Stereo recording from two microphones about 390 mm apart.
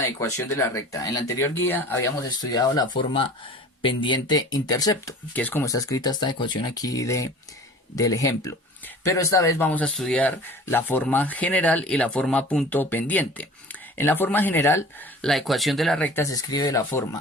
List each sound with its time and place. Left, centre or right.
0.0 s speech: centre